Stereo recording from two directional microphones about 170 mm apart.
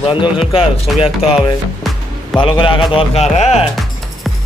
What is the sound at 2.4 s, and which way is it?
Speech, 30° left (ahead or behind).